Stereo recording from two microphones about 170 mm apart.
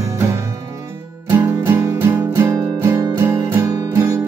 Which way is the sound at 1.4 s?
15° right (ahead or behind).